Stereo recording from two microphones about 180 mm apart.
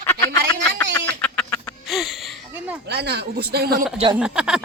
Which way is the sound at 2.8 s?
65° right (ahead or behind).